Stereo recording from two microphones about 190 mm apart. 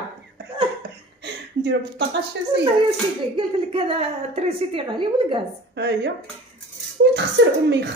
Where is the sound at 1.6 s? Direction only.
60° right (ahead or behind).